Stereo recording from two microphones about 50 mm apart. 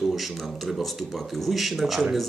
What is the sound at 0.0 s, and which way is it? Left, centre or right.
Speech, centre.